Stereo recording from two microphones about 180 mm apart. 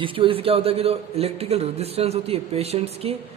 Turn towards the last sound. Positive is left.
turn(degrees=-35)  # may be behind; listen again after turning